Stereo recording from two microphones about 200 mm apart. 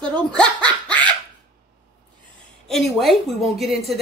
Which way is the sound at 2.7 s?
Centre (ahead or behind).